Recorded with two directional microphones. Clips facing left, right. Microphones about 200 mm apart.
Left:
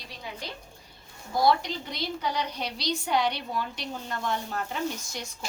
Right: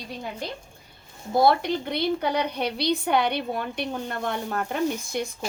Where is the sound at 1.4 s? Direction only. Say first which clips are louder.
Right 2 dB; 55° right (ahead or behind).